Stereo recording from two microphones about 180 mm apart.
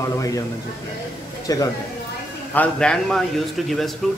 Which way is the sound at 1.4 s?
20° left (ahead or behind).